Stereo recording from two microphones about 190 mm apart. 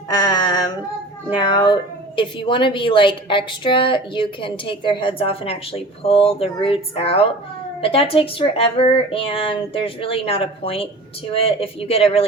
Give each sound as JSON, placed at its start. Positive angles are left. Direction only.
{"t": 0.2, "sound": "female singing", "side_deg": 20}
{"t": 1.4, "sound": "a woman's voice", "side_deg": 25}